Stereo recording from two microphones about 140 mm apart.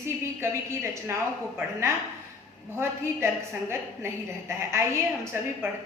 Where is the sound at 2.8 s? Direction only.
20° right (ahead or behind).